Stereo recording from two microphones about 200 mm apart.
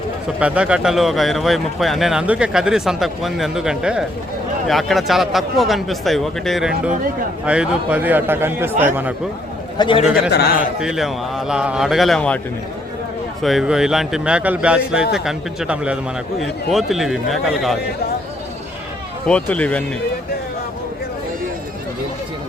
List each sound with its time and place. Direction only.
0.3 s a man's voice: 5° right (ahead or behind)
9.7 s a man's voice: 25° left (ahead or behind)
10.2 s a man's voice: 50° left (ahead or behind)
10.6 s a man's voice: 5° right (ahead or behind)
13.4 s a man's voice: centre (ahead or behind)
19.3 s a man's voice: 5° left (ahead or behind)